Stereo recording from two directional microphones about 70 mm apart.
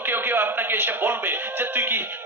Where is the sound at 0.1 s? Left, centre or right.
Right.